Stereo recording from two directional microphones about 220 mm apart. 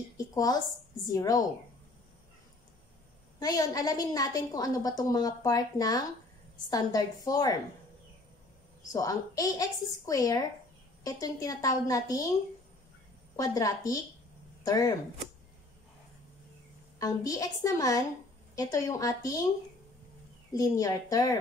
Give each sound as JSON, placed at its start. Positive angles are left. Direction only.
{"t": 0.3, "sound": "a woman's voice", "side_deg": 15}
{"t": 3.3, "sound": "a woman's voice", "side_deg": 15}
{"t": 8.8, "sound": "a woman's voice", "side_deg": 15}
{"t": 13.4, "sound": "a woman's voice", "side_deg": 15}
{"t": 17.0, "sound": "a woman's voice", "side_deg": 15}
{"t": 20.5, "sound": "a woman's voice", "side_deg": 15}